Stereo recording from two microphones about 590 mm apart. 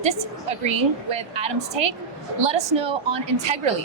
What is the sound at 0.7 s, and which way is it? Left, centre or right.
Speech, right.